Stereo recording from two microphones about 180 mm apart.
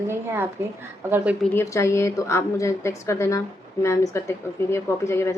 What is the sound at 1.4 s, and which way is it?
A woman's voice, 15° left (ahead or behind).